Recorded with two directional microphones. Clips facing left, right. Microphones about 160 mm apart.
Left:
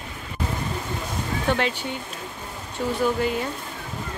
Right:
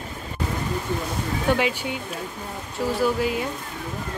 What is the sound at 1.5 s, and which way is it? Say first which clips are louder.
Speech: right 2 dB; 10° right (ahead or behind).